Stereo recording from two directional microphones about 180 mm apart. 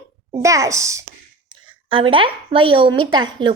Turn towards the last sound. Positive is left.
turn(degrees=-25)  # may be behind; listen again after turning